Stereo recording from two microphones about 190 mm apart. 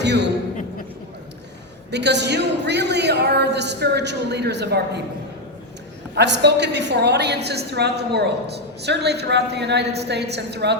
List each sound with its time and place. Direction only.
0.0 s a man's voice: 65° right (ahead or behind)
1.9 s a woman's voice: 65° right (ahead or behind)
6.1 s a woman's voice: 65° right (ahead or behind)